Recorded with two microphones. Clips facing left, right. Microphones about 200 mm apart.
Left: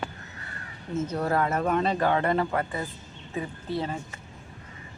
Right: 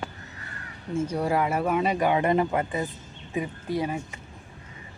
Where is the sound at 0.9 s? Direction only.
10° right (ahead or behind).